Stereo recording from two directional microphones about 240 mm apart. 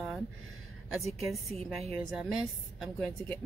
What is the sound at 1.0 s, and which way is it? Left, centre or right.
Speech, right.